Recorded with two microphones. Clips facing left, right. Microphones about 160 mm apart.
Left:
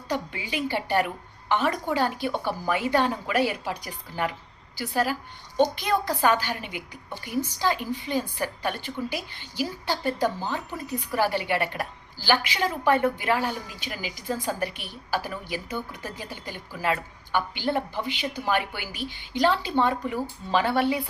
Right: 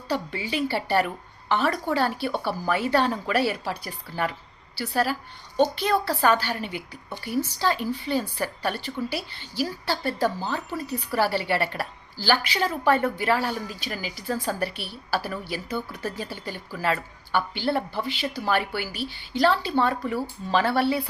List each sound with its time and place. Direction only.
0.1 s a woman's voice: 15° left (ahead or behind)